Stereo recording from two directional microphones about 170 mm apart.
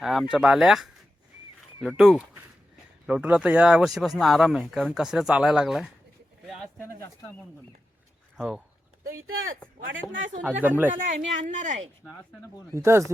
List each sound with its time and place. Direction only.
0.0 s speech: 5° right (ahead or behind)
6.7 s speech: 15° left (ahead or behind)
8.4 s speech: 5° right (ahead or behind)
10.1 s speech: 90° right
10.4 s speech: 10° right (ahead or behind)
10.9 s speech: 45° right (ahead or behind)
12.7 s speech: 15° right (ahead or behind)